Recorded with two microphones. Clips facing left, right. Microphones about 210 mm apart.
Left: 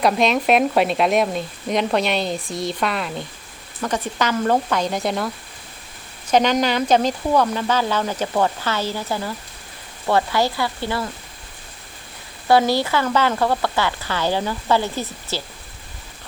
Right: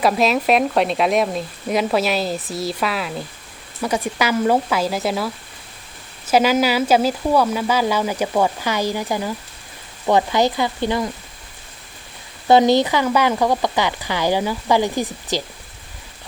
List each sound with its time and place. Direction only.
0.0 s speech: centre (ahead or behind); by 11.1 s 20° right (ahead or behind)
12.5 s speech: 20° right (ahead or behind)